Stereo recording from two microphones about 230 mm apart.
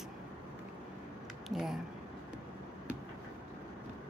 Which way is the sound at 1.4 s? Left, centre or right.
Centre.